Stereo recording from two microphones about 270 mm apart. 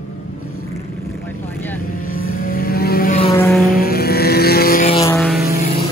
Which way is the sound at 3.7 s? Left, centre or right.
Left.